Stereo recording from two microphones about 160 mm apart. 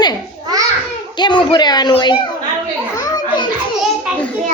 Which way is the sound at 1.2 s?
30° left (ahead or behind).